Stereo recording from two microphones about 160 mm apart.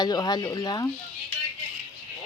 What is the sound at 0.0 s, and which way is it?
Speech, 25° left (ahead or behind).